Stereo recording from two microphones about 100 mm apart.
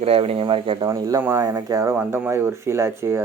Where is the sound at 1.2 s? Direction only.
20° right (ahead or behind).